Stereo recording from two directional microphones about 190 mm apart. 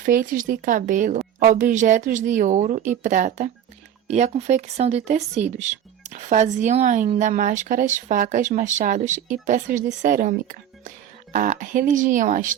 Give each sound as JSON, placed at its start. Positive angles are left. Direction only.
{"t": 0.0, "sound": "speech", "side_deg": -45}